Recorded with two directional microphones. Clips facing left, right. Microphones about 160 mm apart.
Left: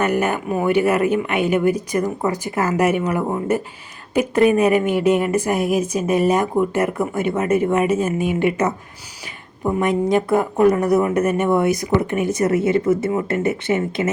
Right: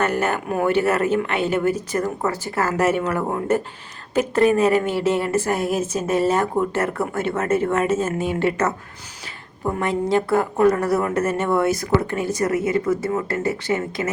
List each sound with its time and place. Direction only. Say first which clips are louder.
0.0 s a woman's voice: left 2 dB; 15° left (ahead or behind)
9.8 s a woman's voice: left 2 dB; 20° left (ahead or behind)